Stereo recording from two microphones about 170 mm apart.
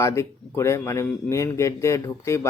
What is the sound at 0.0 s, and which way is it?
Speech, 15° left (ahead or behind).